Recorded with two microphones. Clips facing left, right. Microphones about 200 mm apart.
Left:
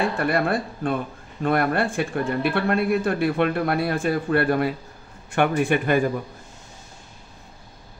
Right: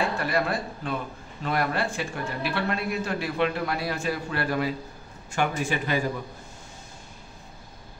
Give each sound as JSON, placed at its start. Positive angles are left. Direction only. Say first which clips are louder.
{"t": 0.2, "sound": "speech", "louder": "left 5 dB", "side_deg": 55}